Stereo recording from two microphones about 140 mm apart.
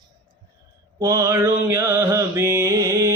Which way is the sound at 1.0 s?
20° right (ahead or behind).